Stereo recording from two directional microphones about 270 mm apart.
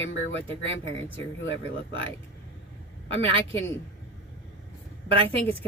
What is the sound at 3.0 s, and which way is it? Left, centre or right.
Speech, left.